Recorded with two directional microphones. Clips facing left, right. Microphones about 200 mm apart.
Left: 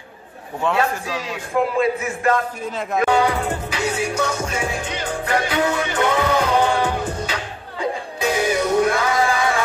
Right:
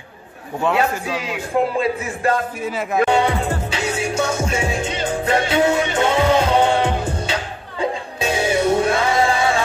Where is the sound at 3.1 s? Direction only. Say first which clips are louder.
Right 1 dB; 25° right (ahead or behind).